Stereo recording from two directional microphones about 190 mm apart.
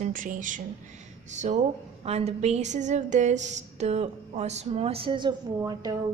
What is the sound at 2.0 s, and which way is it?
A woman's voice, 35° right (ahead or behind).